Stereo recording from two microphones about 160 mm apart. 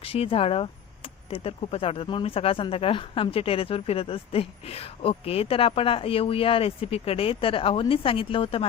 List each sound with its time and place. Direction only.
0.0 s speech: 35° left (ahead or behind)